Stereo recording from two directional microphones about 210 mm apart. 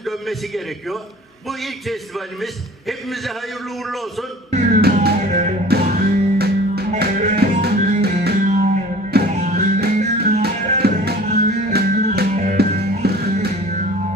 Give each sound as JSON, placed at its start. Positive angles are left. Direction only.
{"t": 0.0, "sound": "a man's voice", "side_deg": 0}
{"t": 4.5, "sound": "music", "side_deg": -40}
{"t": 5.6, "sound": "music", "side_deg": -50}
{"t": 10.4, "sound": "music", "side_deg": -50}